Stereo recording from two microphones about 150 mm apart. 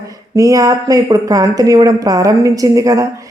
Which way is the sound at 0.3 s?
20° right (ahead or behind).